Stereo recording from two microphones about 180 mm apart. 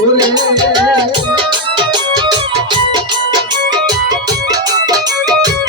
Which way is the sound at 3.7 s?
20° right (ahead or behind).